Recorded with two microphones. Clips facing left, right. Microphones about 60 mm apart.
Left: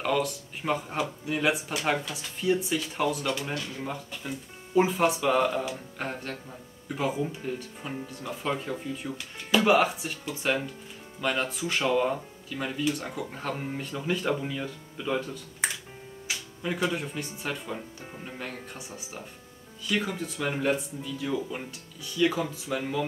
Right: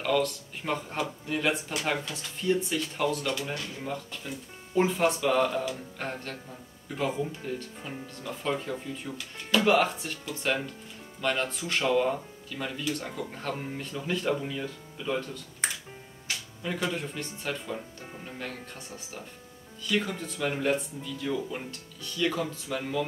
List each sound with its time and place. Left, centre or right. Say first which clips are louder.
0.0 s speech: even; centre
16.3 s speech: left 2 dB; centre